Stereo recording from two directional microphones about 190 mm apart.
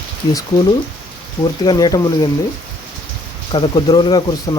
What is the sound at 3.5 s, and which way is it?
Speech, 25° left (ahead or behind).